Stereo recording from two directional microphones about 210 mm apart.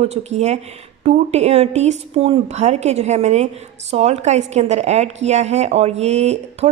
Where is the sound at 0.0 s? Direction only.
30° right (ahead or behind).